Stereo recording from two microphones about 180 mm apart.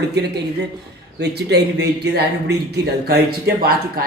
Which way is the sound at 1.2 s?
70° right (ahead or behind).